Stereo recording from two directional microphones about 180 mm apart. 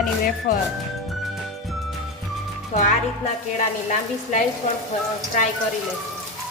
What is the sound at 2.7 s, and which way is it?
Speech, 40° left (ahead or behind).